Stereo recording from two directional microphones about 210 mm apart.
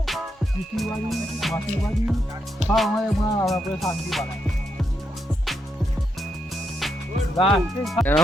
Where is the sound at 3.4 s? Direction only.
Centre (ahead or behind).